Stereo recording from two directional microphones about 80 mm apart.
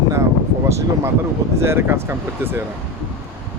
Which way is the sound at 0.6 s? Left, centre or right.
Right.